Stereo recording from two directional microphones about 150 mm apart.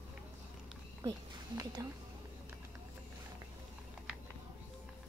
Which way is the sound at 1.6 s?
25° right (ahead or behind).